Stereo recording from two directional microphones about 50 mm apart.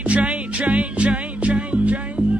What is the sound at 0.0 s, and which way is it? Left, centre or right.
Music, right.